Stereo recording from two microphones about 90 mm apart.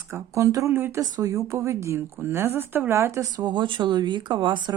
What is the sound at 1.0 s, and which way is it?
Speech, 40° right (ahead or behind).